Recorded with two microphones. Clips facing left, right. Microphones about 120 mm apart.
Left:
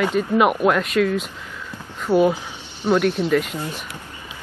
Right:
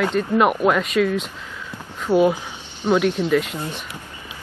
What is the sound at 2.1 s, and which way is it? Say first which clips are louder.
Speech: even; 10° left (ahead or behind).